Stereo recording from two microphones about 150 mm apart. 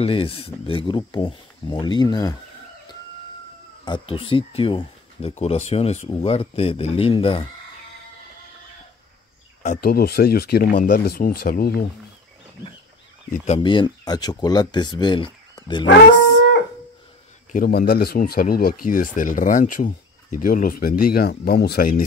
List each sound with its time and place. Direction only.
0.0 s speech: 40° left (ahead or behind)
3.8 s speech: 35° left (ahead or behind)
9.8 s speech: 90° left
13.6 s speech: 30° left (ahead or behind)
17.5 s speech: 75° left (ahead or behind)